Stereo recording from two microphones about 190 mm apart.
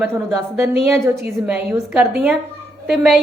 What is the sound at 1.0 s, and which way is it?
A woman's voice, 15° right (ahead or behind).